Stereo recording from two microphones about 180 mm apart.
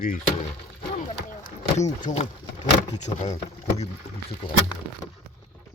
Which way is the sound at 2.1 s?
40° left (ahead or behind).